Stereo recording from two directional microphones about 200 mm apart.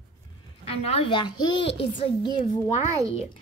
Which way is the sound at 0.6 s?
30° left (ahead or behind).